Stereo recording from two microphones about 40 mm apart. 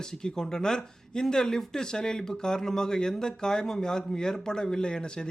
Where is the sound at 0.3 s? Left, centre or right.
Centre.